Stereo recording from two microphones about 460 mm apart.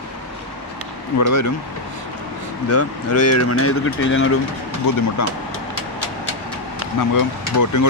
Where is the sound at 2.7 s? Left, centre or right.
Left.